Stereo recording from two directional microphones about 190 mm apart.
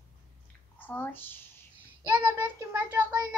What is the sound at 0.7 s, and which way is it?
Speech, 10° left (ahead or behind).